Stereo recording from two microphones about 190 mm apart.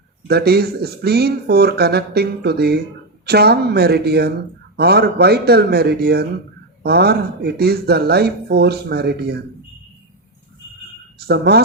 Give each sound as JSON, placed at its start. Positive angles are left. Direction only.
{"t": 0.3, "sound": "speech", "side_deg": -55}
{"t": 11.3, "sound": "speech", "side_deg": -60}